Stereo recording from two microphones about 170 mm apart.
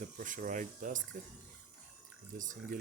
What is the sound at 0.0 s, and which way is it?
Speech, 50° right (ahead or behind).